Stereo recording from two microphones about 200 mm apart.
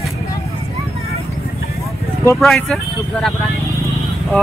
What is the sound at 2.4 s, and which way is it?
Speech, centre (ahead or behind).